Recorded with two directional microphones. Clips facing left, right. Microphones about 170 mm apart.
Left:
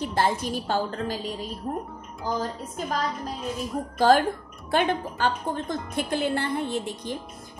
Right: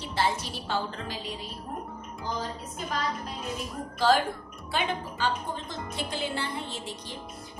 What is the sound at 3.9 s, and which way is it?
A woman's voice, 50° left (ahead or behind).